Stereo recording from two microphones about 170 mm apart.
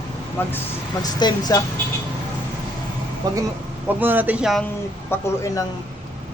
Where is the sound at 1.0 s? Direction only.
25° left (ahead or behind).